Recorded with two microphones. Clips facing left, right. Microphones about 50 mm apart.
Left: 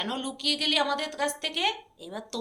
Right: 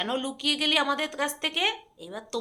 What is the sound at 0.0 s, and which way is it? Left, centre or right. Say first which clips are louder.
A woman's voice: right 3 dB; centre.